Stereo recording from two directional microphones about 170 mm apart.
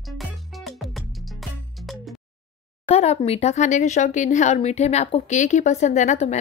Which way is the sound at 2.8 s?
40° left (ahead or behind).